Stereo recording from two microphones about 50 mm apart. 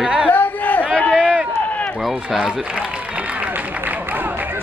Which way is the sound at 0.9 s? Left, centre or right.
Left.